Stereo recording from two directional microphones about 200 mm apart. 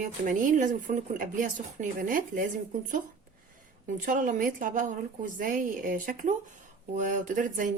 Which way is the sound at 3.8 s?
40° right (ahead or behind).